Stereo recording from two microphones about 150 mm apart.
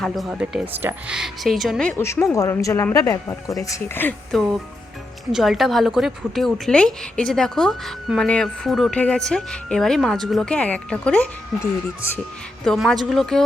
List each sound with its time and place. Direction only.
0.0 s a woman's voice: centre (ahead or behind)
2.0 s speech: 20° left (ahead or behind)
4.3 s a woman's voice: centre (ahead or behind)